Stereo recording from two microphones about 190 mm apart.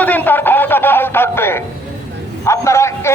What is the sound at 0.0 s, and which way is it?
Music, 10° left (ahead or behind).